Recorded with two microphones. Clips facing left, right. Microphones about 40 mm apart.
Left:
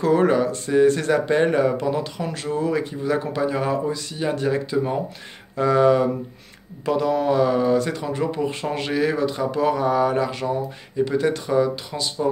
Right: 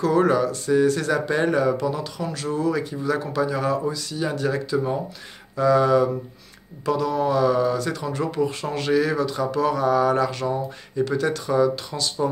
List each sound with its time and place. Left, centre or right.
0.0 s speech: left